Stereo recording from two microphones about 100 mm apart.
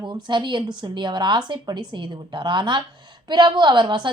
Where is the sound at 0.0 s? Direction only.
50° right (ahead or behind).